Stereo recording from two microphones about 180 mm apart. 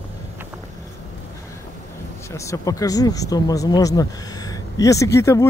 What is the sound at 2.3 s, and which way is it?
Speech, 15° left (ahead or behind).